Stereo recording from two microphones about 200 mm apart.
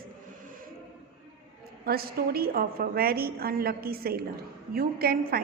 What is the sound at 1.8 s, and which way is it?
A woman's voice, 50° right (ahead or behind).